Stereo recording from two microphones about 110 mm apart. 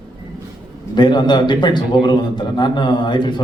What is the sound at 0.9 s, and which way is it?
A man's voice, 40° left (ahead or behind).